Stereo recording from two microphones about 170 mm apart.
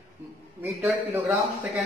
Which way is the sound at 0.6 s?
10° right (ahead or behind).